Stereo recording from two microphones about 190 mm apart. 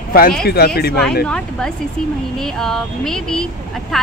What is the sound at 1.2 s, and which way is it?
Vehicle, 5° left (ahead or behind).